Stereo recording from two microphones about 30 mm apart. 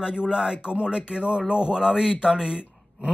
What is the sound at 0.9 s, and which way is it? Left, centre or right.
Speech, right.